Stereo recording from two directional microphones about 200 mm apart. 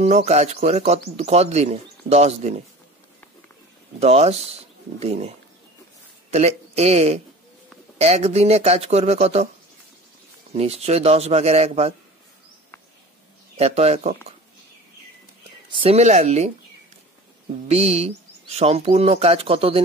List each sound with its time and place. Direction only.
0.0 s speech: 30° right (ahead or behind)
4.0 s speech: 30° right (ahead or behind)
6.3 s speech: 30° right (ahead or behind)
10.5 s speech: 30° right (ahead or behind)
13.6 s speech: 30° right (ahead or behind)
15.7 s speech: 30° right (ahead or behind)
17.6 s speech: 30° right (ahead or behind)